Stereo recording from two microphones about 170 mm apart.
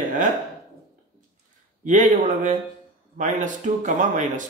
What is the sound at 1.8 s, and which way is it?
Speech, 50° right (ahead or behind).